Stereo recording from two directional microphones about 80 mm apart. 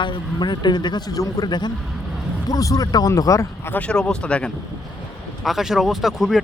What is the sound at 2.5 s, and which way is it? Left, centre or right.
Speech, left.